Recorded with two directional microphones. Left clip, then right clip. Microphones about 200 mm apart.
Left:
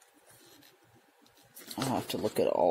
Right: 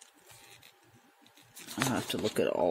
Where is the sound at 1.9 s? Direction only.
Centre (ahead or behind).